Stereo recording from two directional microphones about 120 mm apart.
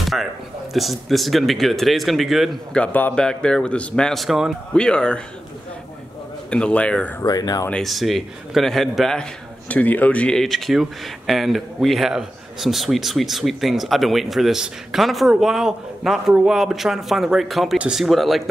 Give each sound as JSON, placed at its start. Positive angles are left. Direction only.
{"t": 0.0, "sound": "a sound", "side_deg": 0}
{"t": 0.7, "sound": "a man's voice", "side_deg": 0}
{"t": 6.5, "sound": "a man's voice", "side_deg": 10}
{"t": 7.2, "sound": "speech", "side_deg": 35}
{"t": 7.7, "sound": "a man's voice", "side_deg": 0}